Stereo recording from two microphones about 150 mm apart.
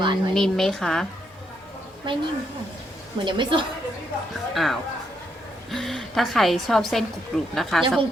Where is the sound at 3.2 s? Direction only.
30° right (ahead or behind).